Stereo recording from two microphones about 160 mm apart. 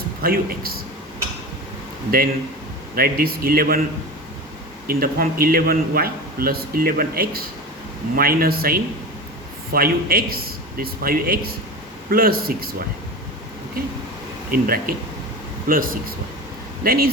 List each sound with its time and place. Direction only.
0.2 s a man's voice: 70° right (ahead or behind)
2.0 s a man's voice: 70° right (ahead or behind)
4.9 s a man's voice: 65° right (ahead or behind)
14.5 s a man's voice: 65° right (ahead or behind)